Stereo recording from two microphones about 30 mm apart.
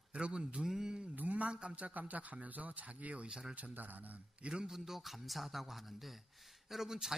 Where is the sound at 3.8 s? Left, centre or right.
Right.